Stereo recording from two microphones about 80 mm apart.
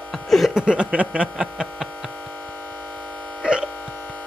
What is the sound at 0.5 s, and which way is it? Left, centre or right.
Speech, centre.